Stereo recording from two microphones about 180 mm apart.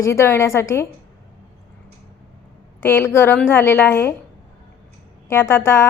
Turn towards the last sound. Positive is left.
turn(degrees=15)  # may be behind; listen again after turning